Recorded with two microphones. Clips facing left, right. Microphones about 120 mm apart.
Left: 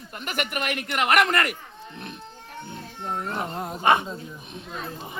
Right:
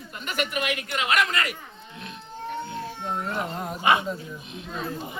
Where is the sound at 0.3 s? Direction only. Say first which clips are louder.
Right 1 dB; 55° left (ahead or behind).